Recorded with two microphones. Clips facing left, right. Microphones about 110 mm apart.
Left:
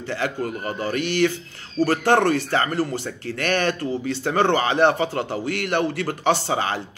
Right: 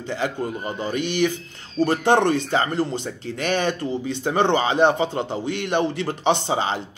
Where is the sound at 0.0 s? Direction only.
15° right (ahead or behind).